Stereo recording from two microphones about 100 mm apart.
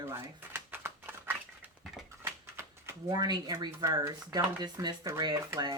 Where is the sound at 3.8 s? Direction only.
35° right (ahead or behind).